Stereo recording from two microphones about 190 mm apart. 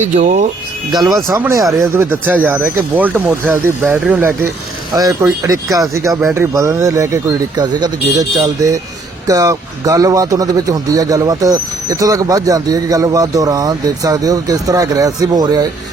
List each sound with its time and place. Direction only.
0.0 s speech: 40° right (ahead or behind)
0.9 s speech: 20° right (ahead or behind)